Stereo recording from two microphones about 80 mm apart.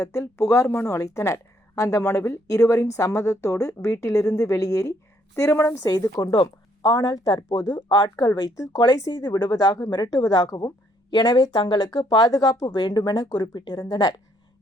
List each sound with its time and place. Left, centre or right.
0.0 s a woman's voice: left
5.5 s a woman's voice: left
5.8 s speech: left
9.9 s speech: left
12.6 s speech: left
12.9 s speech: left